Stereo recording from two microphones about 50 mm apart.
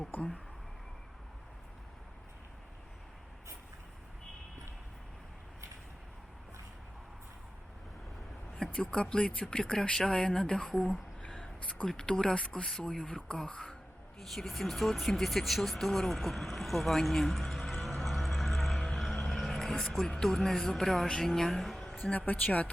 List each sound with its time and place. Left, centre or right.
0.1 s a sound: left
8.5 s speech: centre
10.1 s speech: left
12.6 s speech: centre
14.2 s speech: centre
17.7 s music: centre
18.9 s a woman's voice: centre
22.3 s speech: left